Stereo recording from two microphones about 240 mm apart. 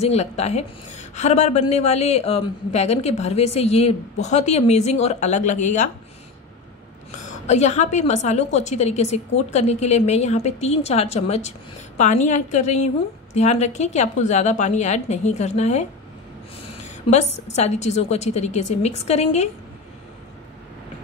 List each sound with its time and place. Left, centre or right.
0.0 s a woman's voice: left
7.4 s a woman's voice: left